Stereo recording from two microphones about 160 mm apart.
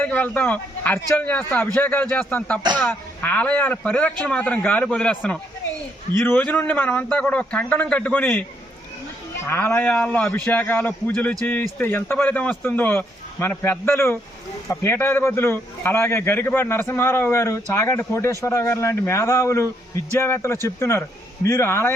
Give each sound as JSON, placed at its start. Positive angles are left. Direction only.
{"t": 0.0, "sound": "a man's voice", "side_deg": 10}